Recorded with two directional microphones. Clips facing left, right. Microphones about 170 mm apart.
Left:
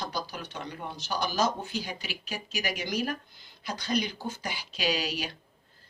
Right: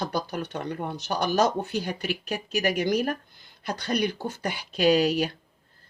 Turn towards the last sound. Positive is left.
turn(degrees=-55)  # may be behind; listen again after turning